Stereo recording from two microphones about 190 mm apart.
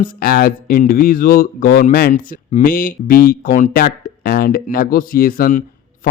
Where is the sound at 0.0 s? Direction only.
50° left (ahead or behind).